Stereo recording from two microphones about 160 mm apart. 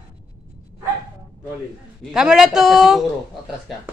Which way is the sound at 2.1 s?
5° right (ahead or behind).